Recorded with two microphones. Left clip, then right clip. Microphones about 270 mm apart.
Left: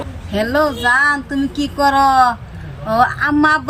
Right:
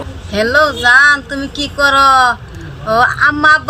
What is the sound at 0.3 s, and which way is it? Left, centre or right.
Speech, centre.